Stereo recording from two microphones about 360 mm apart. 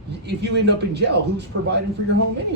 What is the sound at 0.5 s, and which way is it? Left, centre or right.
A man's voice, right.